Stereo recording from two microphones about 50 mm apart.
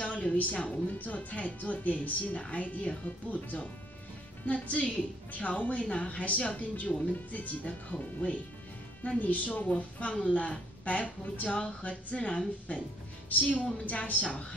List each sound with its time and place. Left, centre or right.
0.0 s a woman's voice: left
13.8 s speech: left